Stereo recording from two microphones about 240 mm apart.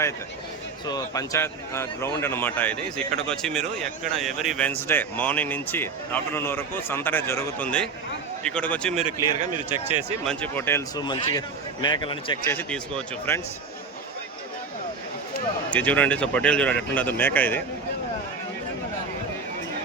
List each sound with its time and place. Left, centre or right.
0.9 s a man's voice: centre
9.3 s speech: right
10.2 s a man's voice: centre
12.5 s a man's voice: centre
15.7 s speech: centre